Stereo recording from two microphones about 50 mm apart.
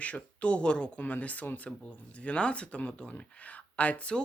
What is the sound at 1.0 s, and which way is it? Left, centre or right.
Speech, left.